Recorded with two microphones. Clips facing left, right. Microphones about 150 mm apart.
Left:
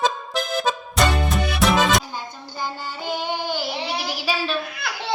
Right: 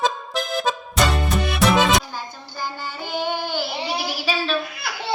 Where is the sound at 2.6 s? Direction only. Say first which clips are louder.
Even; 15° left (ahead or behind).